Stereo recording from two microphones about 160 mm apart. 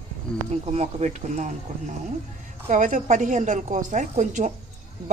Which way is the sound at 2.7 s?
55° right (ahead or behind).